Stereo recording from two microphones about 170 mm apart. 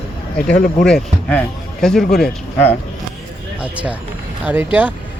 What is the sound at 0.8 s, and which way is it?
Speech, 5° left (ahead or behind).